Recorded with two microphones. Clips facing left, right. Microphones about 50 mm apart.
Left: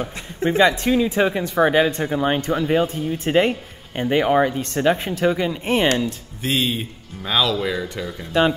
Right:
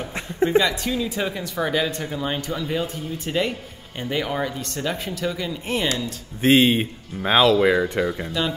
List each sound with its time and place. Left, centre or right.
0.6 s speech: left
6.4 s speech: right
8.3 s speech: left